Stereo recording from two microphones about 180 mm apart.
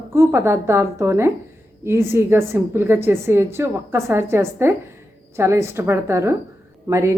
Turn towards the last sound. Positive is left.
turn(degrees=-15)  # may be behind; listen again after turning